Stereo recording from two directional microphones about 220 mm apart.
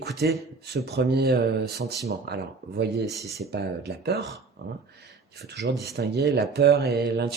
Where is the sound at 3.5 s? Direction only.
50° right (ahead or behind).